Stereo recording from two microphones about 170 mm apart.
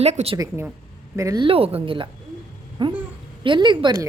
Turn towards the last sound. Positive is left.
turn(degrees=-25)  # may be behind; listen again after turning